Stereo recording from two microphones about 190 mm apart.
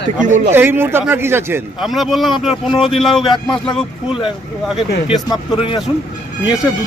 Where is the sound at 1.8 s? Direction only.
Centre (ahead or behind).